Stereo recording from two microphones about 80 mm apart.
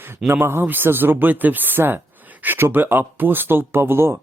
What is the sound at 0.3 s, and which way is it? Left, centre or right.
Speech, right.